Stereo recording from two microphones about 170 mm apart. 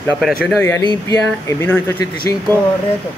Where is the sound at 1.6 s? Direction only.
10° left (ahead or behind).